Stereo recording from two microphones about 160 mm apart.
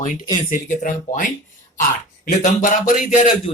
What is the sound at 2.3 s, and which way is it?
Speech, 55° left (ahead or behind).